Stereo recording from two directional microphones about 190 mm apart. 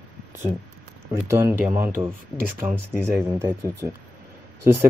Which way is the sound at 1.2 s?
15° right (ahead or behind).